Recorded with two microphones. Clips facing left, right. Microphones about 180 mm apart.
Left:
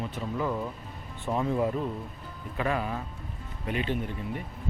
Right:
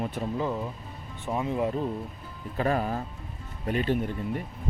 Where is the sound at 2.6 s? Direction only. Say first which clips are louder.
Right 3 dB; 40° right (ahead or behind).